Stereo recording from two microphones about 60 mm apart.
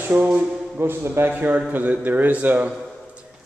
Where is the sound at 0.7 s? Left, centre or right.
Right.